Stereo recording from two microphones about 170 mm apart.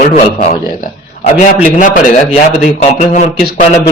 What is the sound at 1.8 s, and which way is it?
A man's voice, 45° left (ahead or behind).